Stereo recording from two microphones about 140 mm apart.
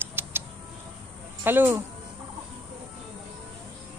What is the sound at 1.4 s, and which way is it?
Speech, 15° right (ahead or behind).